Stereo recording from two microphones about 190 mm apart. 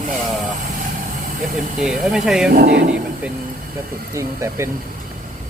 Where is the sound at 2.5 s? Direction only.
60° right (ahead or behind).